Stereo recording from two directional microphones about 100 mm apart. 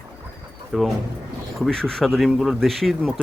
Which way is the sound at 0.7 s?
Centre (ahead or behind).